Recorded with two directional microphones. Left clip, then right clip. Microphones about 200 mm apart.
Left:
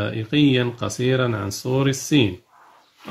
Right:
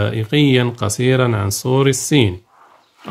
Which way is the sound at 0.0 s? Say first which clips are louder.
Right 3 dB; 35° right (ahead or behind).